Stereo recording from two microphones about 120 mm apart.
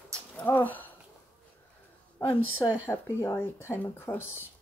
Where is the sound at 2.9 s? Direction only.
20° left (ahead or behind).